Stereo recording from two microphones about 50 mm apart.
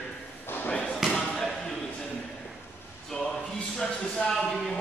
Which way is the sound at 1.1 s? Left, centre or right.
Centre.